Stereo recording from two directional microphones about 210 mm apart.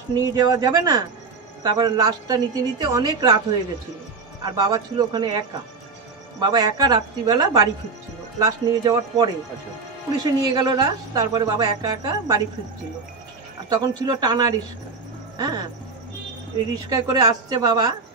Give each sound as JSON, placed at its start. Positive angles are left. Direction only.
{"t": 0.2, "sound": "a woman's voice", "side_deg": -20}
{"t": 4.4, "sound": "a woman's voice", "side_deg": -20}
{"t": 6.4, "sound": "a woman's voice", "side_deg": -20}
{"t": 13.7, "sound": "a woman's voice", "side_deg": -20}
{"t": 16.9, "sound": "a woman's voice", "side_deg": -20}